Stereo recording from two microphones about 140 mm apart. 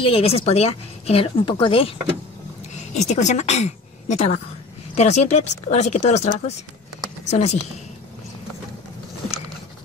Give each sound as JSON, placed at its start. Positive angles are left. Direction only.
{"t": 0.0, "sound": "speech", "side_deg": 45}
{"t": 2.9, "sound": "a woman's voice", "side_deg": 55}